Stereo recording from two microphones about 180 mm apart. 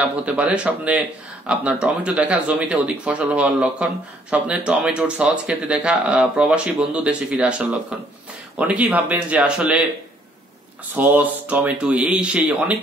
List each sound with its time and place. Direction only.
0.0 s speech: 5° right (ahead or behind)
11.0 s speech: 10° right (ahead or behind)